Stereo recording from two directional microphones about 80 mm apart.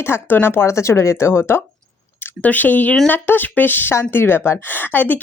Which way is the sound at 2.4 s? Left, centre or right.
Left.